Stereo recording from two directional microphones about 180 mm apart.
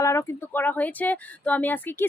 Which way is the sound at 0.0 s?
15° left (ahead or behind).